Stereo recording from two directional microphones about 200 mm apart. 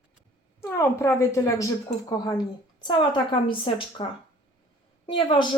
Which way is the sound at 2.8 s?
20° left (ahead or behind).